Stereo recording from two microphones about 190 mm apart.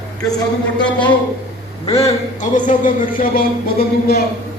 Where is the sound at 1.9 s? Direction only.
35° left (ahead or behind).